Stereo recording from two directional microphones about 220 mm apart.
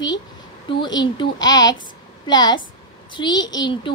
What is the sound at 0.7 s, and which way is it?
A child's voice, 20° left (ahead or behind).